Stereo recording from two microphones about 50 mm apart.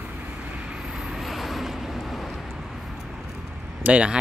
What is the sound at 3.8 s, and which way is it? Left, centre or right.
Speech, right.